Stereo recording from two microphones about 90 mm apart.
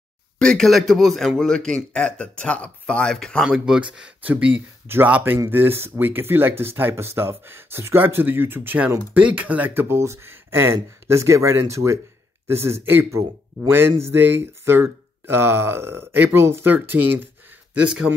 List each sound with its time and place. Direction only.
0.4 s a man's voice: 5° left (ahead or behind)
3.4 s speech: 10° right (ahead or behind)
17.8 s speech: 10° right (ahead or behind)